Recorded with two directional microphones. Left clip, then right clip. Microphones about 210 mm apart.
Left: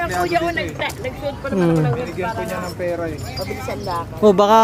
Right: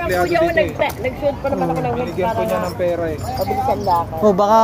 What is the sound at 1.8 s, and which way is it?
Speech, 25° left (ahead or behind).